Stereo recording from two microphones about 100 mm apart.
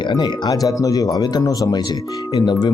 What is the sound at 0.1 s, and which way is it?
Speech, 45° left (ahead or behind).